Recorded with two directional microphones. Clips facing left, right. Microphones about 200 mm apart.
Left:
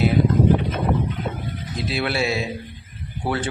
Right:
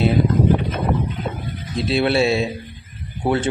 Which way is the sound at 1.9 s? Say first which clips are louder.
Right 6 dB; 25° right (ahead or behind).